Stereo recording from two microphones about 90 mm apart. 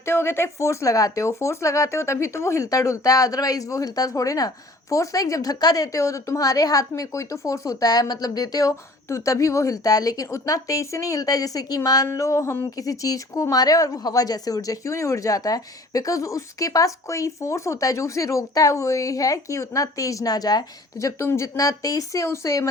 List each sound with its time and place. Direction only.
0.0 s speech: 25° left (ahead or behind); by 21.1 s 45° left (ahead or behind)
21.2 s speech: 30° left (ahead or behind)